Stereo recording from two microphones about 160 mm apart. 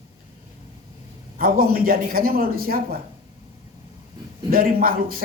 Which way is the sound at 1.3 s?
65° right (ahead or behind).